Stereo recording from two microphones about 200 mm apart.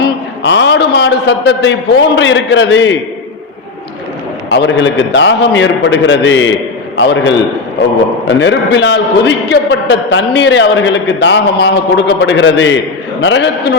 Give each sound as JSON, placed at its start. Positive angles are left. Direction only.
{"t": 0.0, "sound": "a man's voice", "side_deg": 60}
{"t": 4.4, "sound": "a man's voice", "side_deg": 65}